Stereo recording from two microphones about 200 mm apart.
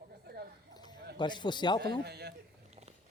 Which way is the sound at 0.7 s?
20° left (ahead or behind).